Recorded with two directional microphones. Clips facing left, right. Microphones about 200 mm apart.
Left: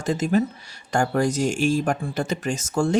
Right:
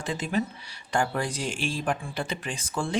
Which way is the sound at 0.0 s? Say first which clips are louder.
Left 7 dB; 45° left (ahead or behind).